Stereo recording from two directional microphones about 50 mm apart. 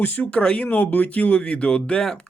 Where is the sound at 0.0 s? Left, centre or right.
Left.